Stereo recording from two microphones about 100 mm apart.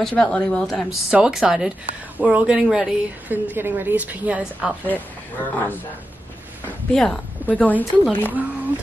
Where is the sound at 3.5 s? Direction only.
20° right (ahead or behind).